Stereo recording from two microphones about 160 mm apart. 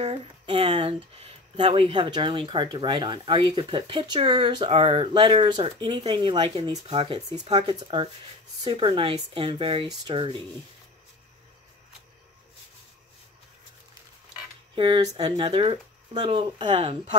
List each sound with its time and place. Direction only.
0.0 s speech: 35° right (ahead or behind)
14.8 s speech: 30° right (ahead or behind)